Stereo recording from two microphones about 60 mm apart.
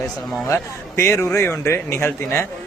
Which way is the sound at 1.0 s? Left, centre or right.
Left.